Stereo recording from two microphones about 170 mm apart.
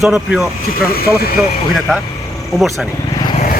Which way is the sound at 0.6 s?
60° left (ahead or behind).